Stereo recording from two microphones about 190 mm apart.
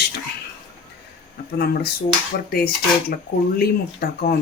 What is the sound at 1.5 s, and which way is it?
Speech, 55° left (ahead or behind).